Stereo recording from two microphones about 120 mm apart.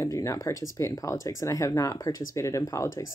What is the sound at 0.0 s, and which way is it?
Speech, 25° left (ahead or behind).